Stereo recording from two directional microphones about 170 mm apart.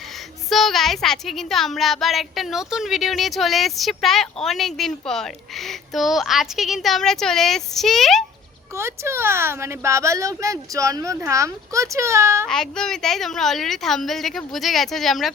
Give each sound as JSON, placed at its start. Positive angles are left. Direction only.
{"t": 0.5, "sound": "speech", "side_deg": 0}
{"t": 8.7, "sound": "speech", "side_deg": -15}
{"t": 12.5, "sound": "speech", "side_deg": 5}